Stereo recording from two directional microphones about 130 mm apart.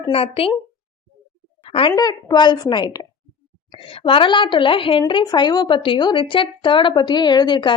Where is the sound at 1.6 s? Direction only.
45° left (ahead or behind).